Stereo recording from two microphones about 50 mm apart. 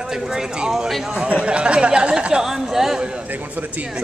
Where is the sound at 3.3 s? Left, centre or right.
Right.